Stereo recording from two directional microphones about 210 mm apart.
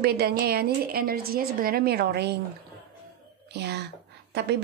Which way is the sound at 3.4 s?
50° right (ahead or behind).